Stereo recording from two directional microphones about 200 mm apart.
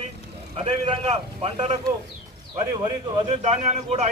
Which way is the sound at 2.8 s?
35° right (ahead or behind).